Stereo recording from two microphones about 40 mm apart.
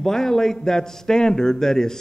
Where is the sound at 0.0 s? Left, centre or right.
Centre.